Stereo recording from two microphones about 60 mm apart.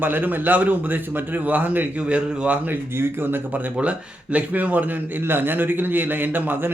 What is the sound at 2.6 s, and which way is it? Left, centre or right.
Speech, right.